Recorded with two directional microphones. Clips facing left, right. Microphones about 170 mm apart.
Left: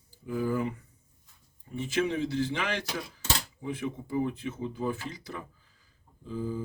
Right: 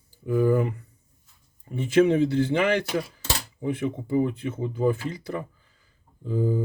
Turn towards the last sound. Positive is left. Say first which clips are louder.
# right 8 dB
turn(degrees=-60)  # may be behind; listen again after turning